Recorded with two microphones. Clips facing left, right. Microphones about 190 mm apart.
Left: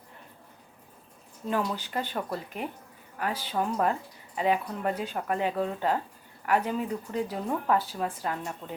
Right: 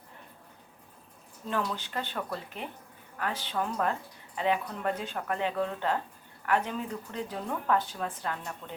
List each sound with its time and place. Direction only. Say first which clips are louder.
1.5 s speech: left 3 dB; 10° left (ahead or behind)
8.6 s speech: left 3 dB; 20° left (ahead or behind)